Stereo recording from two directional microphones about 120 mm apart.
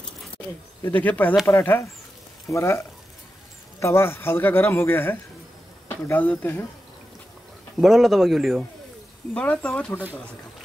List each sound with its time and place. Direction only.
0.8 s a man's voice: 15° left (ahead or behind)
3.8 s a man's voice: 20° left (ahead or behind)
7.8 s a man's voice: centre (ahead or behind)
9.3 s speech: 10° left (ahead or behind)